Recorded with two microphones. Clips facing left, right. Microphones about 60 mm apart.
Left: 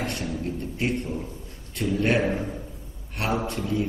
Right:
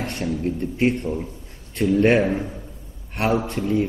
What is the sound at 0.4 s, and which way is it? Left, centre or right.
A man's voice, right.